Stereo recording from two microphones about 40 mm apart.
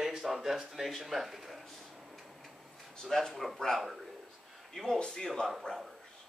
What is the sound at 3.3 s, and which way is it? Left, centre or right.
Speech, centre.